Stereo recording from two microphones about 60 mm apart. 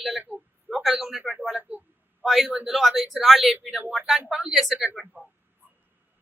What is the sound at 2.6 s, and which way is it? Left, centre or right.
A woman's voice, centre.